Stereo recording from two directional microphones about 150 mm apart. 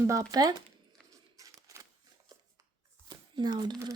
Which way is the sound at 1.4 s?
20° right (ahead or behind).